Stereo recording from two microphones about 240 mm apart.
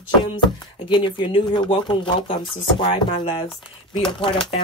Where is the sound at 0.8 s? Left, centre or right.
Centre.